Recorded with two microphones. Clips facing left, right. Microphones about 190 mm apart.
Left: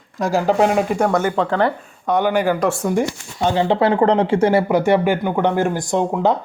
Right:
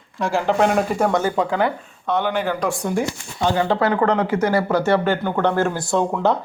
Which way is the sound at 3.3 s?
20° left (ahead or behind).